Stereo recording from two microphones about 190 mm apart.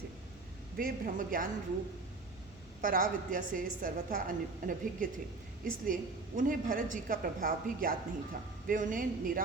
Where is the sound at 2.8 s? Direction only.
45° right (ahead or behind).